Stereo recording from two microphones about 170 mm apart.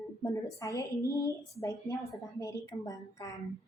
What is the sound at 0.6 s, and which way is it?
A woman's voice, 20° left (ahead or behind).